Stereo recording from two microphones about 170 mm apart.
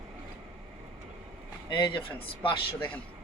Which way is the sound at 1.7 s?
30° left (ahead or behind).